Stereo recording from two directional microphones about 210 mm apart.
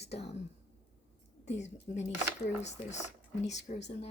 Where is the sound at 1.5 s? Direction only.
35° left (ahead or behind).